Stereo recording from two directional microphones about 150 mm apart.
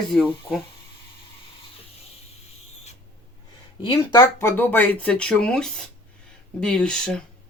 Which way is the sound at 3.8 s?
30° left (ahead or behind).